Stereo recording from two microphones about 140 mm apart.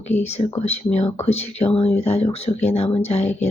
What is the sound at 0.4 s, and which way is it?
Speech, 40° left (ahead or behind).